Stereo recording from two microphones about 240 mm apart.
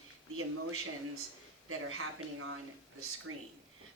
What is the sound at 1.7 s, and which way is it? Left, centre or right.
Speech, right.